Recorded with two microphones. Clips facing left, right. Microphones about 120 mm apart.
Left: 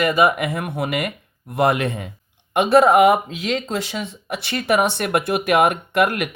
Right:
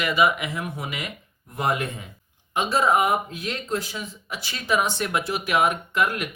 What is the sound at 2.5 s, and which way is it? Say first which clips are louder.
Speech: left 8 dB; 65° left (ahead or behind).